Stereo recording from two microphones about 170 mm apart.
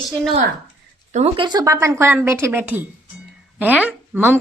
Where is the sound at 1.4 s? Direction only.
20° right (ahead or behind).